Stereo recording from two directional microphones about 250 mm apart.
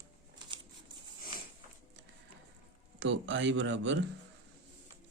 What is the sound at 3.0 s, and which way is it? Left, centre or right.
Speech, right.